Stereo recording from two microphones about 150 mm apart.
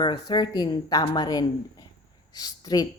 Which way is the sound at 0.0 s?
30° left (ahead or behind).